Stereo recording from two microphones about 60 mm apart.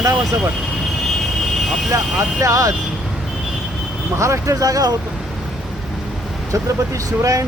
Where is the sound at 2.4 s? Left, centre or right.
Right.